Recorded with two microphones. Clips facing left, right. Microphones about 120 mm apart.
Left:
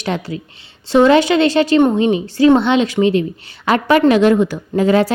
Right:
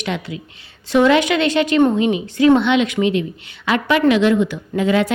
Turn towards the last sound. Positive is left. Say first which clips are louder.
# left 4 dB
turn(degrees=40)  # may be behind; listen again after turning